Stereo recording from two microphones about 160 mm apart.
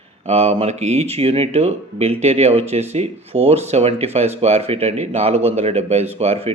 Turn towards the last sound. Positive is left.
turn(degrees=-40)  # may be behind; listen again after turning